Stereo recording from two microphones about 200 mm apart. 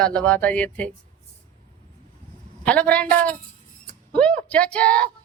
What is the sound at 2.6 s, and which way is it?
A woman's voice, 5° left (ahead or behind).